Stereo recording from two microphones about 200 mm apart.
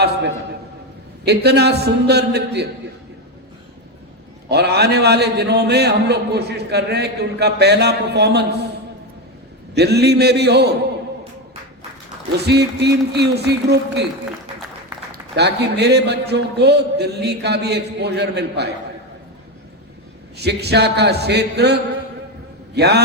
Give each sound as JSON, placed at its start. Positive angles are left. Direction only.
{"t": 1.2, "sound": "a man's voice", "side_deg": -55}
{"t": 4.4, "sound": "a man's voice", "side_deg": -55}
{"t": 9.7, "sound": "a man's voice", "side_deg": -55}
{"t": 12.4, "sound": "a man's voice", "side_deg": -55}
{"t": 15.1, "sound": "a man's voice", "side_deg": -55}
{"t": 20.3, "sound": "a man's voice", "side_deg": -55}